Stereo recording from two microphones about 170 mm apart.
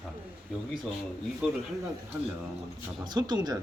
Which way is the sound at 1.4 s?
5° right (ahead or behind).